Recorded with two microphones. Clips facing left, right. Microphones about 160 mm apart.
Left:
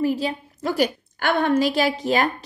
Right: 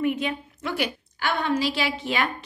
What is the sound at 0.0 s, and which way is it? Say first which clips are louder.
A woman's voice: left 3 dB; 35° left (ahead or behind).